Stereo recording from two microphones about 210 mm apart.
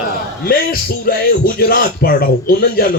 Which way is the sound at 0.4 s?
45° left (ahead or behind).